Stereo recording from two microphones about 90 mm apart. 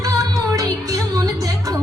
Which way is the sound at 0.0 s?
40° right (ahead or behind).